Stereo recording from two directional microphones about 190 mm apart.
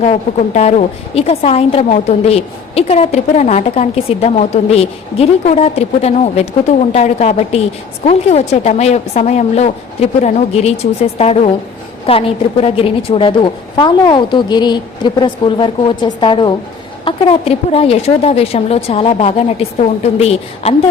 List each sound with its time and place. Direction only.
0.0 s a woman's voice: 35° left (ahead or behind)